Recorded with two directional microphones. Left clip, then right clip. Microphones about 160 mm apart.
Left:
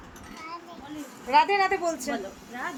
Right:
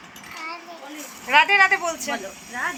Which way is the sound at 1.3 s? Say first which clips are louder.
Right 6 dB; 25° left (ahead or behind).